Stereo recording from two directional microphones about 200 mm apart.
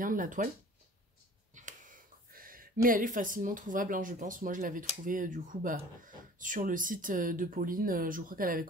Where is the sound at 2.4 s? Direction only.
45° right (ahead or behind).